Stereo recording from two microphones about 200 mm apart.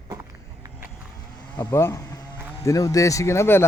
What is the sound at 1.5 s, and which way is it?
Speech, 15° left (ahead or behind).